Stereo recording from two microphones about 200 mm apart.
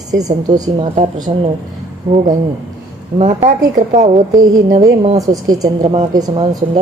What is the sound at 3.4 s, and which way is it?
A woman's voice, 35° right (ahead or behind).